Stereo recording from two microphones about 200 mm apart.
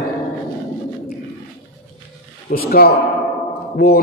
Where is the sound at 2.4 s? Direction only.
50° left (ahead or behind).